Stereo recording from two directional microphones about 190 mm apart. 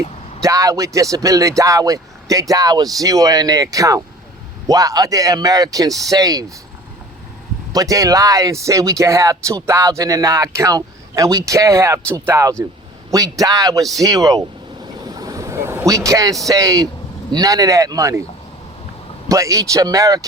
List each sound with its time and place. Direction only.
0.4 s speech: 15° right (ahead or behind)
7.7 s speech: 20° right (ahead or behind)
15.0 s boat: 20° right (ahead or behind)
16.5 s speech: 15° right (ahead or behind)
19.3 s speech: 15° right (ahead or behind)